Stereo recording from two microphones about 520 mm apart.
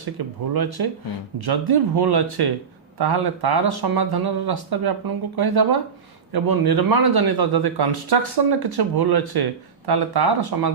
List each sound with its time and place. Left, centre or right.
0.2 s a man's voice: right